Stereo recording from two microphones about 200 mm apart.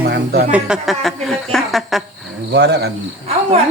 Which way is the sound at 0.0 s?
55° right (ahead or behind).